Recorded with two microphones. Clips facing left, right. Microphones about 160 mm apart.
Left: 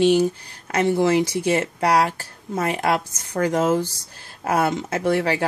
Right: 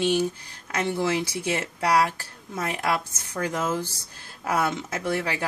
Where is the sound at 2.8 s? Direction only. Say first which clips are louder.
Left 5 dB; 45° left (ahead or behind).